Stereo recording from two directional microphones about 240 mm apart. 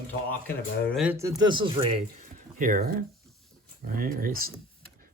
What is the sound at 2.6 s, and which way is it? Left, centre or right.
Speech, right.